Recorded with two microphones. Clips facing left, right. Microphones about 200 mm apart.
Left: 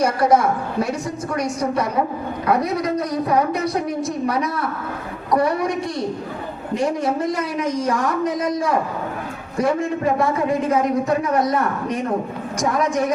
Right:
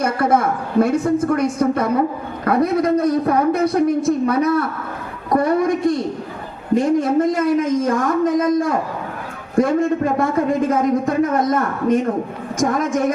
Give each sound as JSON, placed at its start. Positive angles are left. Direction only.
{"t": 0.0, "sound": "a woman's voice", "side_deg": -55}
{"t": 10.7, "sound": "a man's voice", "side_deg": -50}